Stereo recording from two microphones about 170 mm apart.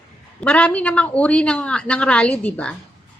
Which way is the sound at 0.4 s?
10° left (ahead or behind).